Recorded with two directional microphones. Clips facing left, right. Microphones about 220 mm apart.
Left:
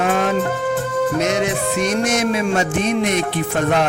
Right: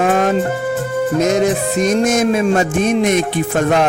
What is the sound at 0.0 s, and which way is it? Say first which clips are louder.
Music: right 4 dB; 45° right (ahead or behind).